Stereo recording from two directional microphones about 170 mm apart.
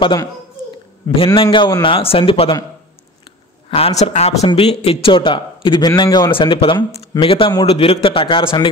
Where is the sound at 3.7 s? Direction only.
40° left (ahead or behind).